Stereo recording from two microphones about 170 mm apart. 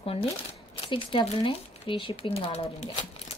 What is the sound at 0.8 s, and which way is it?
Speech, 30° left (ahead or behind).